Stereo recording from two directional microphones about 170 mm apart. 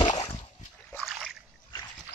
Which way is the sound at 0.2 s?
25° left (ahead or behind).